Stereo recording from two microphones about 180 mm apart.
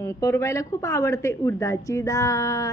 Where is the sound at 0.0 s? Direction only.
15° left (ahead or behind).